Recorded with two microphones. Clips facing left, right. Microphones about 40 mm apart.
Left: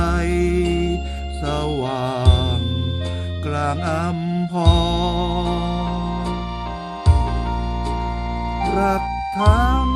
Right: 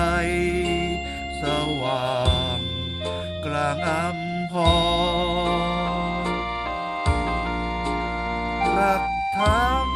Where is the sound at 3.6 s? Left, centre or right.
Right.